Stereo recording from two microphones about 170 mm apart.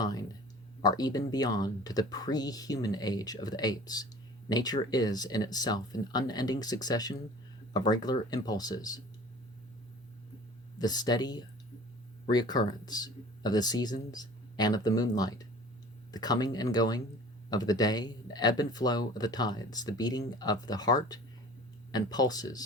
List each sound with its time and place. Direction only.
0.0 s a sound: 20° left (ahead or behind)
0.8 s speech: 20° left (ahead or behind)
10.8 s speech: 25° left (ahead or behind)